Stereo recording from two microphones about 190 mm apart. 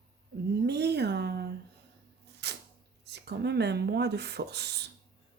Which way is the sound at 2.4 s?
60° right (ahead or behind).